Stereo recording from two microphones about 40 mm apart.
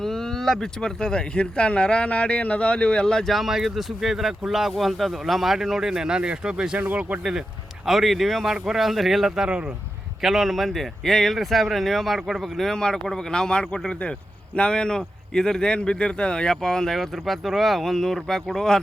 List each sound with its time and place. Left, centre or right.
0.0 s speech: centre
3.2 s speech: centre; by 6.7 s right
6.7 s speech: right
7.9 s speech: centre